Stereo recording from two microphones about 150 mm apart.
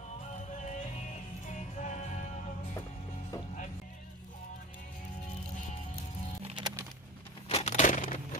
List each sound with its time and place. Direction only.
1.8 s music: 55° left (ahead or behind)
6.4 s music: 30° right (ahead or behind)
7.4 s a sound: 45° left (ahead or behind)